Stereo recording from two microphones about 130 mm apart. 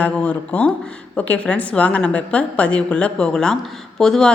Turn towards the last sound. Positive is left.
turn(degrees=5)  # may be behind; listen again after turning